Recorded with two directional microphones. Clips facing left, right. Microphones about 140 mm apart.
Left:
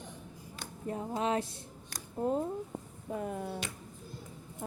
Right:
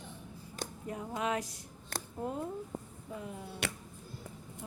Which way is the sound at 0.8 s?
30° left (ahead or behind).